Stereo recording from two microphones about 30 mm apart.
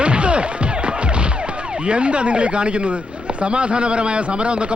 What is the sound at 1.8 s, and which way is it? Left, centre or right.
A man's voice, right.